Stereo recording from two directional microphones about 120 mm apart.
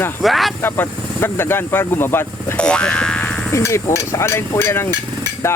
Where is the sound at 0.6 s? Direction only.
20° left (ahead or behind).